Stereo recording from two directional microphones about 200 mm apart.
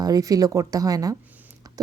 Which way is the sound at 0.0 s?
20° right (ahead or behind).